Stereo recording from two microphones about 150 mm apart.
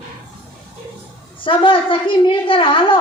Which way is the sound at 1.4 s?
35° left (ahead or behind).